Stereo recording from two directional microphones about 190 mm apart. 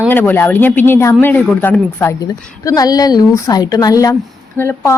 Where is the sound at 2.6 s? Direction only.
20° left (ahead or behind).